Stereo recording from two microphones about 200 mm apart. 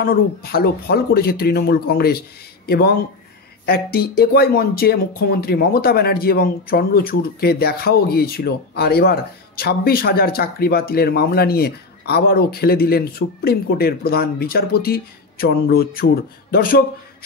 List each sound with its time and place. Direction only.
0.0 s speech: 50° left (ahead or behind)